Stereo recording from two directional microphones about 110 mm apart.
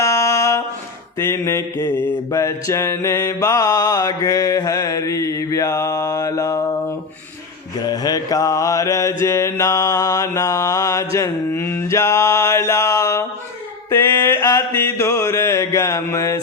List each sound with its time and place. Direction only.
0.0 s a sound: 30° left (ahead or behind)
1.2 s mantra: 25° left (ahead or behind)
7.8 s mantra: 35° left (ahead or behind)
14.3 s mantra: 35° left (ahead or behind)